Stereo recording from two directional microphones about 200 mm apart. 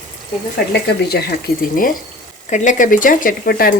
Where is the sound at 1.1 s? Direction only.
50° left (ahead or behind).